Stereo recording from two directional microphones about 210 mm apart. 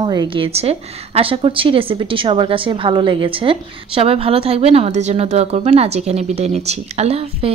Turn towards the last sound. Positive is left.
turn(degrees=-25)  # may be behind; listen again after turning